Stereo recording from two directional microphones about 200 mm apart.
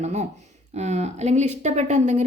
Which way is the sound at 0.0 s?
35° right (ahead or behind).